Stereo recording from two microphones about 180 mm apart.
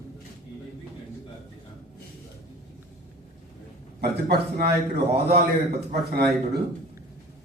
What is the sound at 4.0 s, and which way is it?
Speech, 60° right (ahead or behind).